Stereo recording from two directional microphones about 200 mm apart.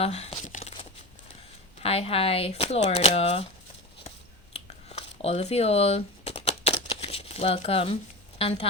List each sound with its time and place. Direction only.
0.0 s crumpling: 30° left (ahead or behind)
1.8 s speech: 30° left (ahead or behind)
4.5 s a sound: 30° left (ahead or behind)
8.4 s speech: 30° left (ahead or behind)